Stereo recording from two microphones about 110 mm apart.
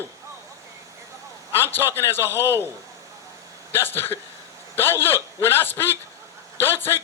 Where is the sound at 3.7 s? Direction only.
20° left (ahead or behind).